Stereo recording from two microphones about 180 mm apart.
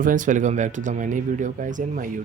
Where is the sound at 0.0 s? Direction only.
45° right (ahead or behind).